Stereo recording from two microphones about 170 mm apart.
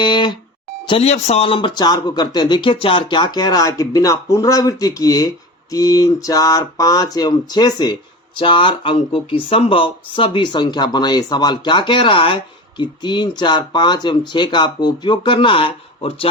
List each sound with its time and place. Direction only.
0.0 s speech: 25° left (ahead or behind)